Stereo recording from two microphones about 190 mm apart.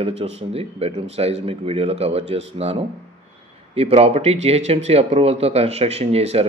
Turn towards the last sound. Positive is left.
turn(degrees=-35)  # may be behind; listen again after turning